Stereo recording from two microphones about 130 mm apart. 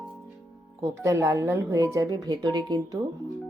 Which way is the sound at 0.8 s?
20° right (ahead or behind).